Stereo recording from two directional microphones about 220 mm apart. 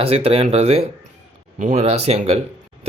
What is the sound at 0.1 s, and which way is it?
Speech, 25° right (ahead or behind).